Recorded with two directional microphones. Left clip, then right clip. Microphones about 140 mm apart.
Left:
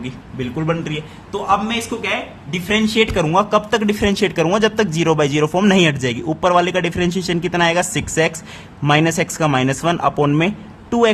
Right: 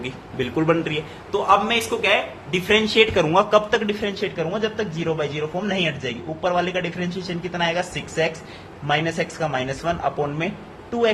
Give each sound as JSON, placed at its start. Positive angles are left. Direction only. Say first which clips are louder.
{"t": 0.0, "sound": "a man's voice", "louder": "even", "side_deg": 10}
{"t": 2.5, "sound": "speech", "louder": "even", "side_deg": 20}